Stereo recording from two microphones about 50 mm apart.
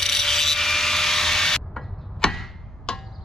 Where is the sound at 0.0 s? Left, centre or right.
Centre.